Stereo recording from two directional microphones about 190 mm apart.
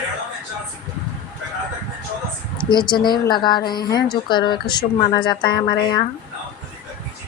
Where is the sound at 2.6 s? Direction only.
25° left (ahead or behind).